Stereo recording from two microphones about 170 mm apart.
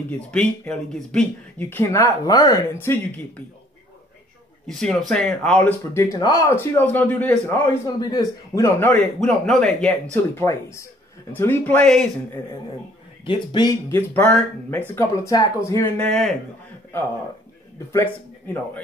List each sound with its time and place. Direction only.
0.3 s speech: 5° left (ahead or behind)
4.6 s speech: centre (ahead or behind)
8.0 s speech: 25° left (ahead or behind); by 9.9 s 5° left (ahead or behind)
10.3 s speech: 15° left (ahead or behind)
13.2 s speech: 30° left (ahead or behind)
13.8 s speech: 10° left (ahead or behind)
17.9 s speech: 10° left (ahead or behind)